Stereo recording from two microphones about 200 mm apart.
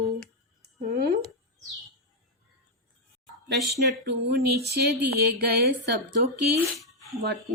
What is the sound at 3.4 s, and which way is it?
A woman's voice, 55° right (ahead or behind).